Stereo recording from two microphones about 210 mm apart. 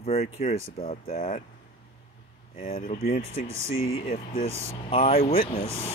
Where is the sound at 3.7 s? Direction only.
70° left (ahead or behind).